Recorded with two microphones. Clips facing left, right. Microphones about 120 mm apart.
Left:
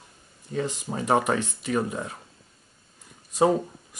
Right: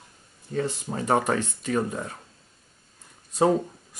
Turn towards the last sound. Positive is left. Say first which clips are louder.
# even
turn(degrees=10)  # may be behind; listen again after turning